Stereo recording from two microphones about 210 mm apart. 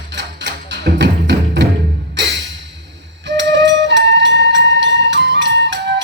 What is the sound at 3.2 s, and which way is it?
Music, 60° right (ahead or behind).